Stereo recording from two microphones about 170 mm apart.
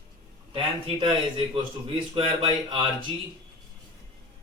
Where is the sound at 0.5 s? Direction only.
30° right (ahead or behind).